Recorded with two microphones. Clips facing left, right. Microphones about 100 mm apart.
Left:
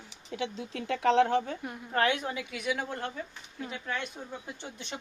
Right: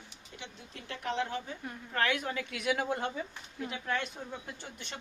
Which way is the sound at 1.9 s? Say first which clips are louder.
Left 4 dB; 30° left (ahead or behind).